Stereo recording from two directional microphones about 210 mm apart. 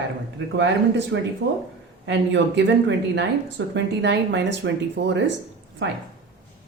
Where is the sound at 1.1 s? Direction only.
60° right (ahead or behind).